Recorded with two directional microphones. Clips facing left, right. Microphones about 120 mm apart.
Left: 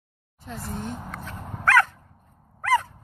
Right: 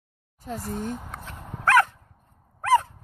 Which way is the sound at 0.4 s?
45° right (ahead or behind).